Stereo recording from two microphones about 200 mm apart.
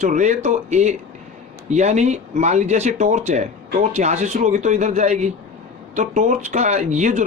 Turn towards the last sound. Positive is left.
turn(degrees=-35)  # may be behind; listen again after turning